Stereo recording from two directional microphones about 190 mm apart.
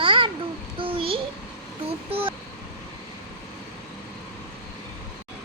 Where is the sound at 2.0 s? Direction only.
30° right (ahead or behind).